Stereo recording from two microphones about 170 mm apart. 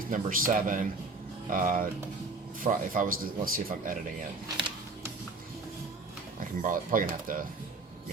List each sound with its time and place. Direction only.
0.1 s speech: 55° right (ahead or behind)
6.6 s speech: 50° right (ahead or behind)